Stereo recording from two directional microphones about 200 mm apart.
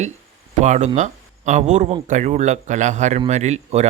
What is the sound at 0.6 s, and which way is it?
Speech, 35° right (ahead or behind).